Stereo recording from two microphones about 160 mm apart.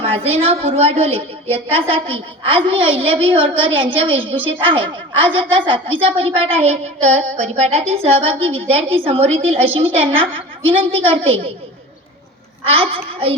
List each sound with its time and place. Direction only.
0.0 s a woman's voice: 35° right (ahead or behind)
12.6 s a woman's voice: 35° right (ahead or behind)